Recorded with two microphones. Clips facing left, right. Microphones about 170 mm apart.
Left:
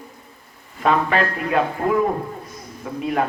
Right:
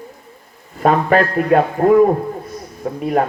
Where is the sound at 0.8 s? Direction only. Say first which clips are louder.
Right 5 dB; 45° right (ahead or behind).